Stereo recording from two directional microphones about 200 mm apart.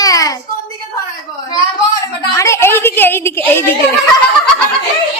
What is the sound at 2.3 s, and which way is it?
A woman's voice, 15° left (ahead or behind).